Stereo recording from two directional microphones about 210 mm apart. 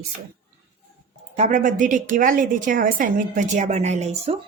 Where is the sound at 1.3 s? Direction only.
35° right (ahead or behind).